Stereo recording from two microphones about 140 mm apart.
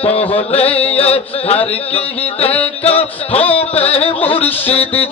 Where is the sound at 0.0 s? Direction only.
40° left (ahead or behind).